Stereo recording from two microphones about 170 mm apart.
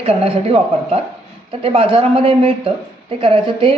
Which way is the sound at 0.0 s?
35° right (ahead or behind).